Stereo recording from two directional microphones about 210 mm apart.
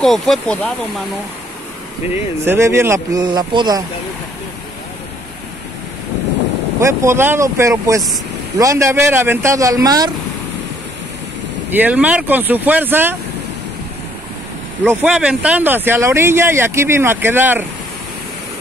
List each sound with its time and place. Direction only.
0.0 s speech: centre (ahead or behind)
2.4 s speech: 10° right (ahead or behind)
6.8 s speech: 15° right (ahead or behind)
11.7 s speech: 10° right (ahead or behind)
14.9 s speech: 5° right (ahead or behind)